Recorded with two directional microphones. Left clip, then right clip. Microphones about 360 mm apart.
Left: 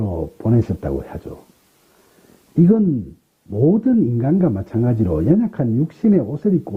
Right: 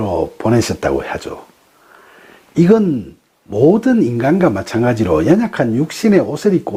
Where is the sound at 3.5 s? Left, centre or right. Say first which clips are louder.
Right 6 dB; right.